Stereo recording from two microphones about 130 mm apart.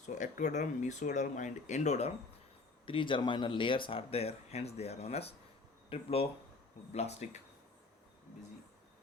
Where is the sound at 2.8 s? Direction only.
40° left (ahead or behind); by 7.4 s 60° left (ahead or behind).